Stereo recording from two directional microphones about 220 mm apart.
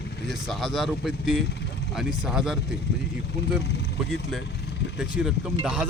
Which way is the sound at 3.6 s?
50° left (ahead or behind).